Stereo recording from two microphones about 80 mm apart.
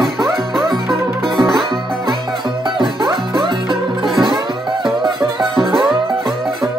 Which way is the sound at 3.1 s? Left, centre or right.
Right.